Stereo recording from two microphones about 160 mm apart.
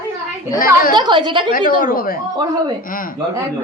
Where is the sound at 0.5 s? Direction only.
60° left (ahead or behind).